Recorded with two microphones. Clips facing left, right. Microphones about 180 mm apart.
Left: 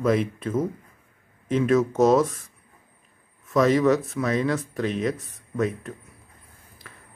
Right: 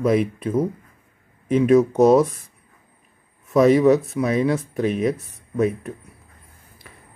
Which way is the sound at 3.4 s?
15° right (ahead or behind).